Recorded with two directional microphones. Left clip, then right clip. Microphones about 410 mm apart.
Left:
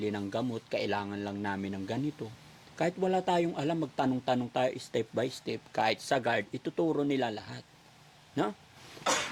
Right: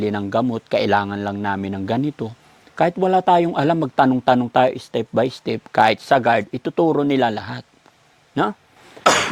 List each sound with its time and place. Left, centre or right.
0.0 s a man's voice: right